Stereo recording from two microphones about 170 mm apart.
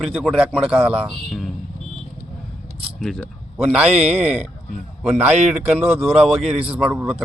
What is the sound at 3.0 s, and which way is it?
A man's voice, centre (ahead or behind).